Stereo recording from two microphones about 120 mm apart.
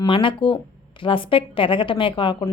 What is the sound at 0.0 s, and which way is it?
A woman's voice, 45° left (ahead or behind).